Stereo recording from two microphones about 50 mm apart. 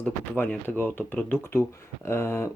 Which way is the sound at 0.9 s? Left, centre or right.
Left.